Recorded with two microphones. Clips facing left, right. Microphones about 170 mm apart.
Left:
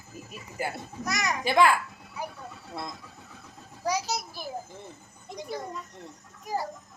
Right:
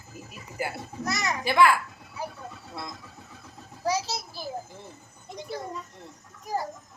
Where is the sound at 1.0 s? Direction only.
15° left (ahead or behind).